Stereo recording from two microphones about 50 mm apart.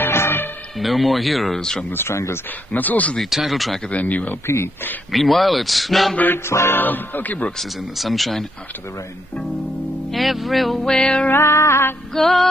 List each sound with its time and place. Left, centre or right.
0.0 s music: left
0.7 s a man's voice: centre
1.6 s music: centre
1.9 s speech: left
2.7 s speech: left
3.3 s a man's voice: centre
3.9 s speech: left
5.1 s a man's voice: centre
6.7 s speech: left
8.0 s a man's voice: centre
10.1 s a man's voice: centre
10.9 s music: centre
11.3 s music: left
12.1 s a man's voice: centre